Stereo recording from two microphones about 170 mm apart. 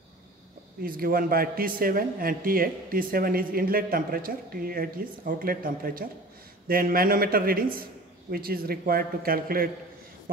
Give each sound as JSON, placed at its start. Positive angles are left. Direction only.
{"t": 0.8, "sound": "a man's voice", "side_deg": -60}